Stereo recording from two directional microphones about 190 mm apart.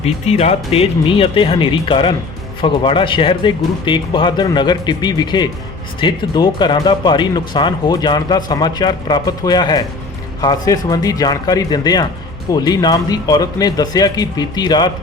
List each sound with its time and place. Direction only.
0.0 s speech: 35° left (ahead or behind)